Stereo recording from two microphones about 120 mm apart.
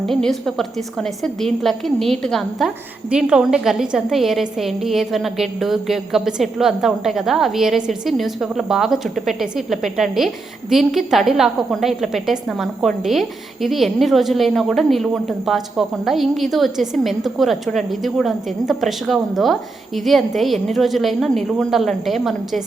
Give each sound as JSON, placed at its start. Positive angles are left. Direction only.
{"t": 0.0, "sound": "a woman's voice", "side_deg": 5}